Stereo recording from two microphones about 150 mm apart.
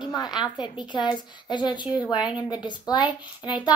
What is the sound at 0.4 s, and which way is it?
A woman's voice, 30° left (ahead or behind).